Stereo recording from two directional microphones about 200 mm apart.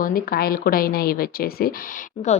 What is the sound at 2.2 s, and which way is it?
Speech, 30° left (ahead or behind).